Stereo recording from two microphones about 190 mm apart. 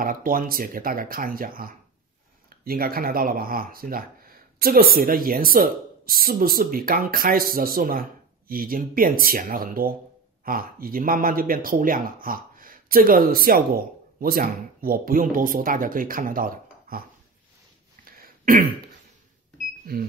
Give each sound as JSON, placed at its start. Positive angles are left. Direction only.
{"t": 0.0, "sound": "speech", "side_deg": -50}
{"t": 18.1, "sound": "throat clearing", "side_deg": -50}